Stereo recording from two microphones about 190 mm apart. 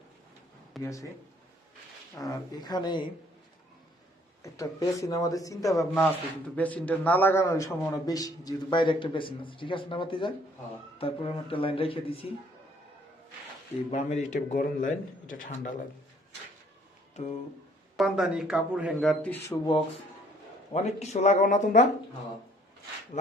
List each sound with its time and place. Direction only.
0.8 s speech: 15° left (ahead or behind)
2.1 s a man's voice: 20° left (ahead or behind)
4.4 s speech: 15° left (ahead or behind)
5.8 s a man's voice: 5° left (ahead or behind); by 12.3 s 30° left (ahead or behind)
13.9 s speech: 40° left (ahead or behind)
17.2 s speech: 40° left (ahead or behind)
17.9 s speech: centre (ahead or behind)
20.7 s speech: 35° left (ahead or behind)
23.1 s speech: 40° left (ahead or behind)